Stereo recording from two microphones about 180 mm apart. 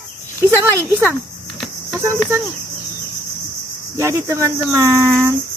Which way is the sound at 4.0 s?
15° right (ahead or behind).